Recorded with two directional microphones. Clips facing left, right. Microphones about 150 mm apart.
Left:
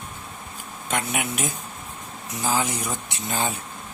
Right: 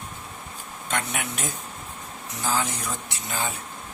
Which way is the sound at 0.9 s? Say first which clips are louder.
Left 3 dB; 10° left (ahead or behind).